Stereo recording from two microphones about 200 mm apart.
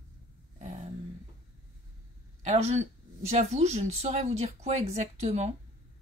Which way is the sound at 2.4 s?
35° right (ahead or behind).